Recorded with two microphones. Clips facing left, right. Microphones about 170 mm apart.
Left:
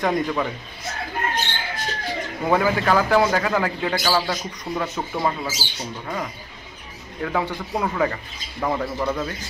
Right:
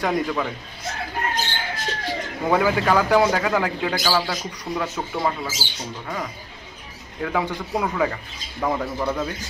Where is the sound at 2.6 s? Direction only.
10° right (ahead or behind).